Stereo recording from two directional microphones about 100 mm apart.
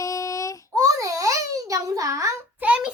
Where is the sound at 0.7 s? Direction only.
35° right (ahead or behind).